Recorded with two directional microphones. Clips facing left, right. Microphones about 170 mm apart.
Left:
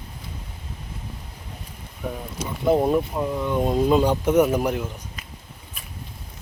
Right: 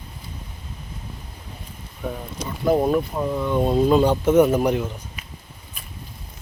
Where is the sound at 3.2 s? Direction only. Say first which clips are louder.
Right 2 dB; 10° left (ahead or behind).